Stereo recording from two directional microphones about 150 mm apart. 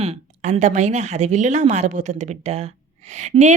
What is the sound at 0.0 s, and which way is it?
A woman's voice, 45° right (ahead or behind).